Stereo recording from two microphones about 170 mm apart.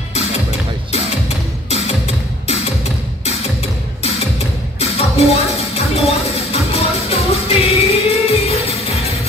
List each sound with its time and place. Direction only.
1.7 s music: 40° left (ahead or behind)
4.7 s music: 35° left (ahead or behind)